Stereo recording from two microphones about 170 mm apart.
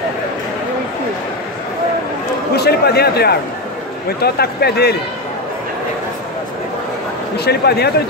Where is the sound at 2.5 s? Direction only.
70° left (ahead or behind).